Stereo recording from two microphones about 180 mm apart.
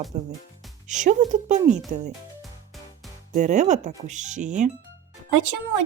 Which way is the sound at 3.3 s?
45° right (ahead or behind).